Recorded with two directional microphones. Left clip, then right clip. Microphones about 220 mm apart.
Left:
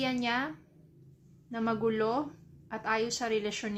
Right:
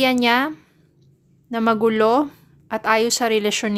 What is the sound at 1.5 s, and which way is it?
A woman's voice, 50° right (ahead or behind).